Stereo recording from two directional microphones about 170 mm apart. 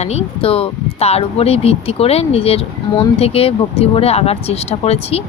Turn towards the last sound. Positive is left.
turn(degrees=35)  # may be behind; listen again after turning